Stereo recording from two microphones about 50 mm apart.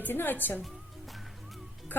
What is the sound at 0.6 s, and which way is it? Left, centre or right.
Music, centre.